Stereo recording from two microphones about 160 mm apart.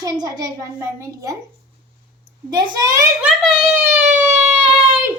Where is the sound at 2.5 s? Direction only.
25° right (ahead or behind).